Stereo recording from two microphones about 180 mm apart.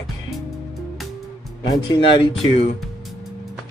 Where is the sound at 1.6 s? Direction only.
25° left (ahead or behind).